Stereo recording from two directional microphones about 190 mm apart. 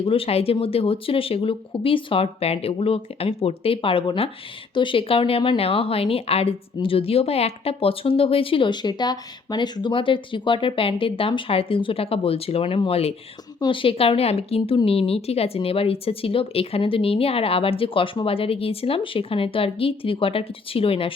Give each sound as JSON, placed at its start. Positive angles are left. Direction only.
{"t": 0.0, "sound": "speech", "side_deg": 30}